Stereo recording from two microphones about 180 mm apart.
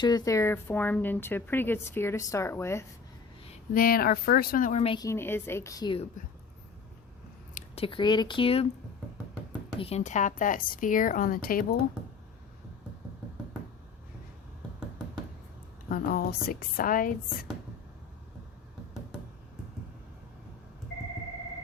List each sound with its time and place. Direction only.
0.0 s a woman's voice: 20° left (ahead or behind)
3.8 s a woman's voice: 55° left (ahead or behind)
4.8 s a woman's voice: 30° left (ahead or behind)
5.0 s a woman's voice: 15° left (ahead or behind)
7.5 s speech: 30° left (ahead or behind)
9.7 s a woman's voice: 35° left (ahead or behind); by 11.9 s 55° left (ahead or behind)
15.9 s a woman's voice: 55° left (ahead or behind)